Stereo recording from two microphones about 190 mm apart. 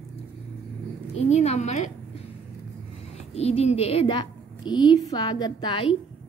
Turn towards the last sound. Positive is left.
turn(degrees=20)  # may be behind; listen again after turning